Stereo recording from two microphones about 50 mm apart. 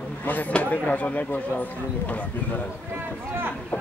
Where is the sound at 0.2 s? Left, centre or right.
Left.